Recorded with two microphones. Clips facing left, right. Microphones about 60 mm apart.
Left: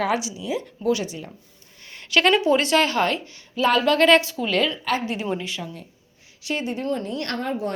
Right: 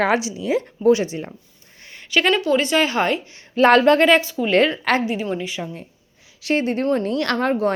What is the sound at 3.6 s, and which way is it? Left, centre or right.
Speech, right.